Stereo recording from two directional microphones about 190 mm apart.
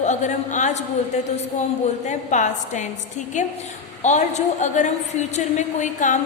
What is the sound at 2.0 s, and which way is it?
A woman's voice, 40° left (ahead or behind).